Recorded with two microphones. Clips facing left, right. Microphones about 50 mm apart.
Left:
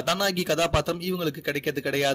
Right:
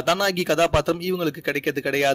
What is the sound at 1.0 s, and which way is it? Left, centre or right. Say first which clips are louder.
Speech: right 4 dB; right.